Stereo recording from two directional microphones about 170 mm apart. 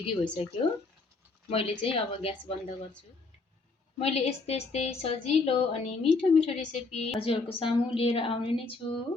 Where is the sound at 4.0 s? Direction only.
35° left (ahead or behind).